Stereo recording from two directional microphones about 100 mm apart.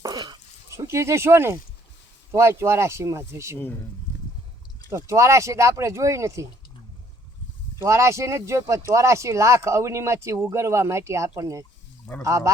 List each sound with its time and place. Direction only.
0.0 s a sound: 45° right (ahead or behind)
0.9 s speech: 25° right (ahead or behind)
4.9 s speech: 30° right (ahead or behind)
7.8 s speech: 30° right (ahead or behind)